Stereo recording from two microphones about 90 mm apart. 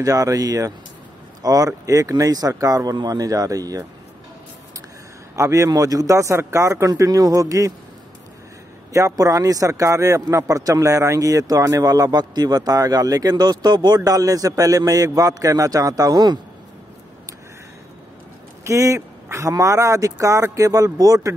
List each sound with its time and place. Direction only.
0.0 s speech: 40° right (ahead or behind)
5.3 s speech: 35° right (ahead or behind)
8.9 s speech: 40° right (ahead or behind)
18.6 s speech: 35° right (ahead or behind)